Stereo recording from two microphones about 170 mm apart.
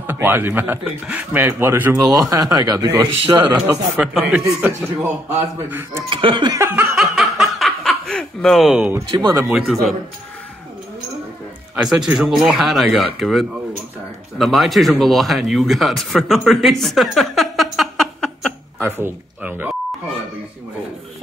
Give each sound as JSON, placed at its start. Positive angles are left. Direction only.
{"t": 0.0, "sound": "a man's voice", "side_deg": -10}
{"t": 6.0, "sound": "a man's voice", "side_deg": -30}
{"t": 7.0, "sound": "snicker", "side_deg": 0}
{"t": 9.1, "sound": "a man's voice", "side_deg": -25}
{"t": 9.4, "sound": "speech", "side_deg": -5}
{"t": 11.7, "sound": "speech", "side_deg": -5}
{"t": 18.8, "sound": "speech", "side_deg": -15}